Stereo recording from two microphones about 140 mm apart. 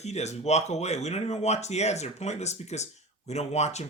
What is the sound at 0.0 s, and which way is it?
Speech, 50° left (ahead or behind).